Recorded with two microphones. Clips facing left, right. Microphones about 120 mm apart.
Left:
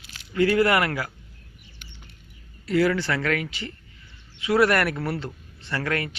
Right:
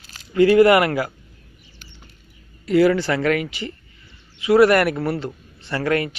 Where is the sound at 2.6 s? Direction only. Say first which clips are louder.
Right 6 dB; 15° right (ahead or behind).